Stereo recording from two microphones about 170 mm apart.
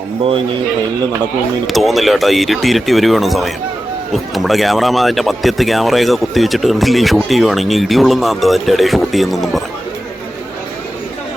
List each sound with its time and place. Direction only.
0.2 s a man's voice: 35° right (ahead or behind)
1.6 s speech: centre (ahead or behind)